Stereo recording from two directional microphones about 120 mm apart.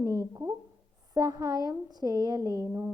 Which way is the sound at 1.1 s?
30° right (ahead or behind).